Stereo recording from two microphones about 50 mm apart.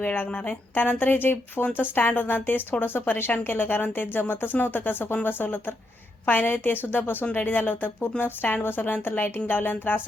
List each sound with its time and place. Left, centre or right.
0.0 s speech: left